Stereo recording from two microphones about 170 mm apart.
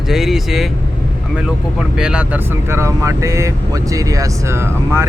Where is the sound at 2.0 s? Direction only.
5° right (ahead or behind).